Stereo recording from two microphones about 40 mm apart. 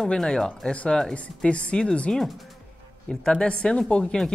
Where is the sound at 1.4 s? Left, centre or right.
Left.